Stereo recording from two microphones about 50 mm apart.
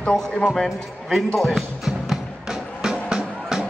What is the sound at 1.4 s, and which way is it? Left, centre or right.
Speech, centre.